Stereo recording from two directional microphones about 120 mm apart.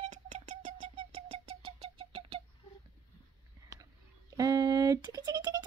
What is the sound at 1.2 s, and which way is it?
Music, 45° right (ahead or behind).